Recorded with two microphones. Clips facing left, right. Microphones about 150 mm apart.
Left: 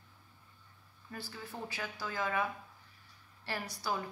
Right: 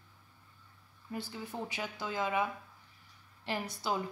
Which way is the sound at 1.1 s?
20° right (ahead or behind).